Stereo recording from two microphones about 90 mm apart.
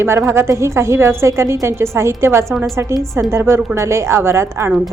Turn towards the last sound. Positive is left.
turn(degrees=-30)  # may be behind; listen again after turning